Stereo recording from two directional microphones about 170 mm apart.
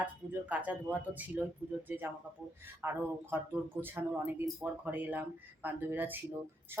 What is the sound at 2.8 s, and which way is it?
Speech, 10° right (ahead or behind).